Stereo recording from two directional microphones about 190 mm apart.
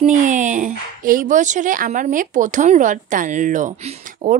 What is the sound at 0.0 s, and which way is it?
Speech, 40° right (ahead or behind).